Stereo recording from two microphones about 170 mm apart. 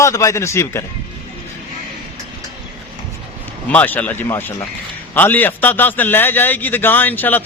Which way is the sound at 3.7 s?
10° left (ahead or behind).